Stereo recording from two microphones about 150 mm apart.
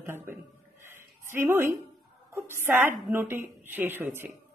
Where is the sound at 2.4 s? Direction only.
15° right (ahead or behind).